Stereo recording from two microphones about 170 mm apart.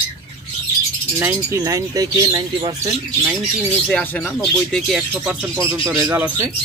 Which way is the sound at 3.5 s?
Centre (ahead or behind).